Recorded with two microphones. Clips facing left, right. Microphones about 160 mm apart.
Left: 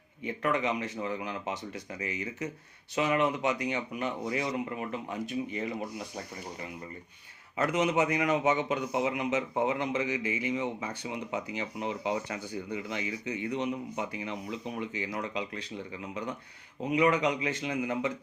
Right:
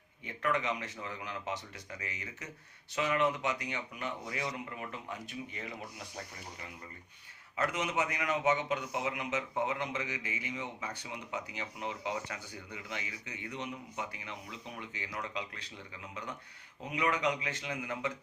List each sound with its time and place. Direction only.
0.3 s a man's voice: 15° left (ahead or behind)
7.5 s a man's voice: 25° left (ahead or behind)